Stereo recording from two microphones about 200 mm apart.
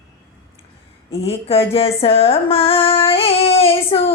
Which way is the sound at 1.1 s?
30° left (ahead or behind).